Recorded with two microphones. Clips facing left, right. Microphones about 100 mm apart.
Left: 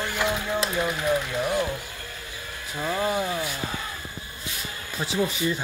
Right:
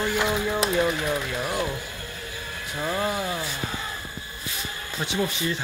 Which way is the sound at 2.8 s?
Centre (ahead or behind).